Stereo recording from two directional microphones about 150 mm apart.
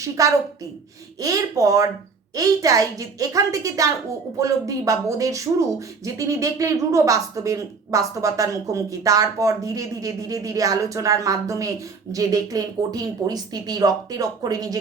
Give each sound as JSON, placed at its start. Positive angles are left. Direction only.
{"t": 0.2, "sound": "a woman's voice", "side_deg": -20}